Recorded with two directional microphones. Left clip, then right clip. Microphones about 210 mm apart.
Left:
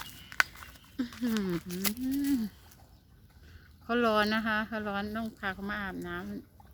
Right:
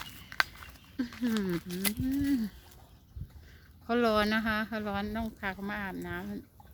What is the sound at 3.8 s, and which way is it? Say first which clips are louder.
Speech: even; centre (ahead or behind).